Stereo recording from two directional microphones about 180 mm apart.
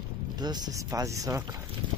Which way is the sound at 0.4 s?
20° right (ahead or behind).